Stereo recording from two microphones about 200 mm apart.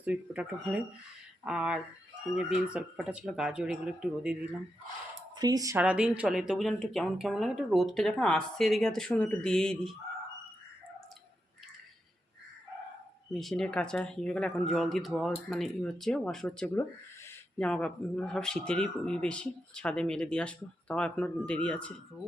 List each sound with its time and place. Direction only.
0.0 s speech: 5° right (ahead or behind)
5.4 s speech: 20° right (ahead or behind)
5.8 s speech: 5° right (ahead or behind)
13.3 s speech: centre (ahead or behind)